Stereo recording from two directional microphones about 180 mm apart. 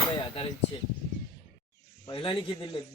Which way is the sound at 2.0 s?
30° left (ahead or behind).